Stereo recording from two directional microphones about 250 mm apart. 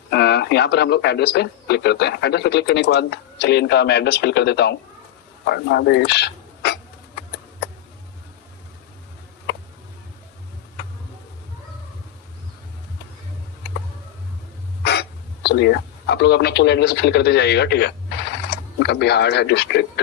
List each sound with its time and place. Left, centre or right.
0.1 s speech: left
5.5 s a sound: left
15.4 s speech: left